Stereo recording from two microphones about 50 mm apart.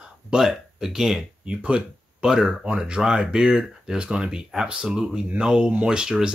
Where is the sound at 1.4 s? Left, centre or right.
Right.